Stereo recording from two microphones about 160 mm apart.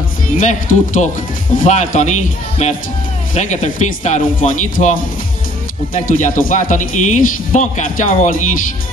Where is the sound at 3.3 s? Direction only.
50° left (ahead or behind).